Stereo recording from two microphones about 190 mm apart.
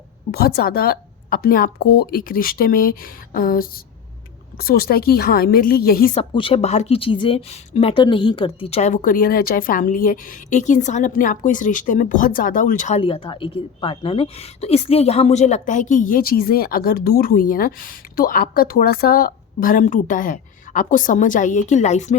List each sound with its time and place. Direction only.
0.3 s a woman's voice: 55° left (ahead or behind)
6.1 s speech: 30° left (ahead or behind)
13.0 s a woman's voice: 30° left (ahead or behind)